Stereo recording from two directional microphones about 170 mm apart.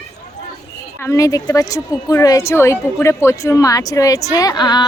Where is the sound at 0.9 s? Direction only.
15° left (ahead or behind).